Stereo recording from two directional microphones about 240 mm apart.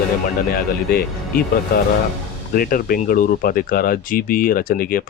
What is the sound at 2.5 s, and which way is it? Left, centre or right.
Speech, left.